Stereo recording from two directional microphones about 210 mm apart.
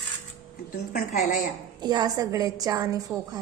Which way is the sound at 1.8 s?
20° right (ahead or behind).